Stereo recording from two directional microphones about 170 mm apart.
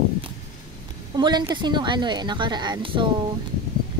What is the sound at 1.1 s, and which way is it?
Speech, 25° right (ahead or behind).